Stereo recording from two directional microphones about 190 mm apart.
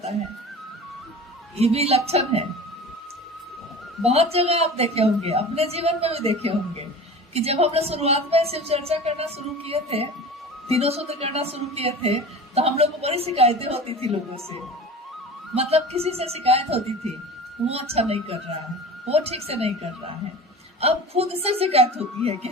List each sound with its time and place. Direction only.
1.5 s a woman's voice: 35° right (ahead or behind)
4.0 s a woman's voice: 30° right (ahead or behind)
20.8 s a woman's voice: 30° right (ahead or behind)